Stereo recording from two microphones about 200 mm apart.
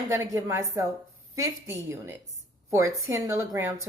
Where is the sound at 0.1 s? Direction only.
15° right (ahead or behind).